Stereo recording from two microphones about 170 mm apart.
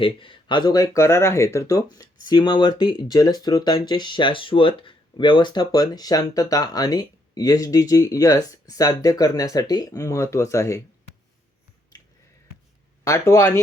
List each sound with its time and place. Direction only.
0.0 s speech: 30° left (ahead or behind)
13.1 s speech: 15° left (ahead or behind)